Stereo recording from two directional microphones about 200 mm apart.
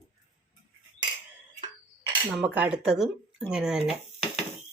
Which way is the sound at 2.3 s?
10° right (ahead or behind).